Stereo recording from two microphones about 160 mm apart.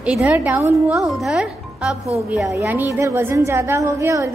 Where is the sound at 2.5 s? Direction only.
15° right (ahead or behind).